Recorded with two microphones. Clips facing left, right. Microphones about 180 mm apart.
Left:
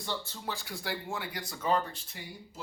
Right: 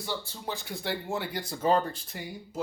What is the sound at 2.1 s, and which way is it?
Speech, 45° right (ahead or behind).